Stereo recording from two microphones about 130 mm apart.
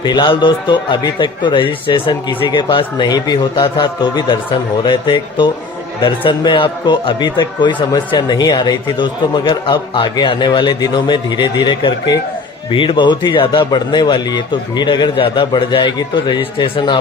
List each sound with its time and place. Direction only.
0.0 s a man's voice: 35° left (ahead or behind)